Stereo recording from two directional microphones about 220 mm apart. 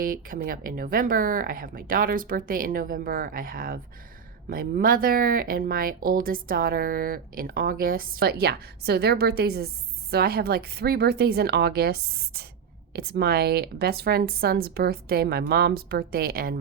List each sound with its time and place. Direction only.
0.0 s a woman's voice: 40° right (ahead or behind)